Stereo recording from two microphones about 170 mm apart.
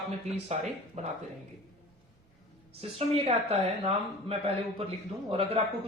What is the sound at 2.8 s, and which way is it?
Speech, 35° right (ahead or behind).